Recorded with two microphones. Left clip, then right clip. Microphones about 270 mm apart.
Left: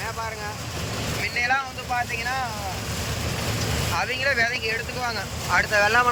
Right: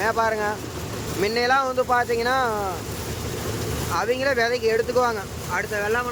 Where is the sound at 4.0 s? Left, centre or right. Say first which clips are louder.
Right 2 dB; centre.